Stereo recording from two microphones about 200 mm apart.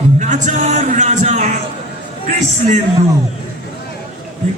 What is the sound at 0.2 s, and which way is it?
Speech, 35° right (ahead or behind).